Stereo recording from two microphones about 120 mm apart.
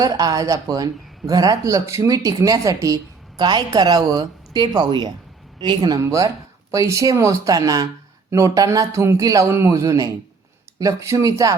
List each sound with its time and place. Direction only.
0.0 s a woman's voice: 30° right (ahead or behind)